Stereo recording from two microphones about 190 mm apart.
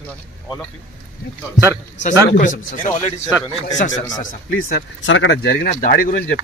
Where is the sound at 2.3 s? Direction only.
45° left (ahead or behind).